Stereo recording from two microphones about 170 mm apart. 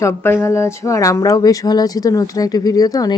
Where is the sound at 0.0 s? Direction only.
15° left (ahead or behind).